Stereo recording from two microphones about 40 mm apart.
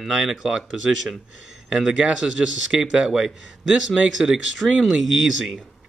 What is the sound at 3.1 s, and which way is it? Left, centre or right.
A man's voice, centre.